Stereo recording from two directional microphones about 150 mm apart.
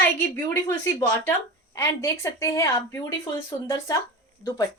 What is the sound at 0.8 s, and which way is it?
Speech, 25° left (ahead or behind).